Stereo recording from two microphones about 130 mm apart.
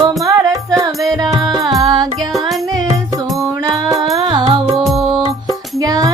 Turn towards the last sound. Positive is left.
turn(degrees=-30)  # may be behind; listen again after turning